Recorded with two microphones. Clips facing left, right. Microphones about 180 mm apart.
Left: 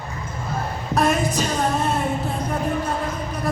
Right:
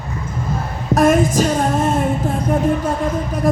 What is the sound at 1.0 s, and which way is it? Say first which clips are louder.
Music: right 7 dB; 45° right (ahead or behind).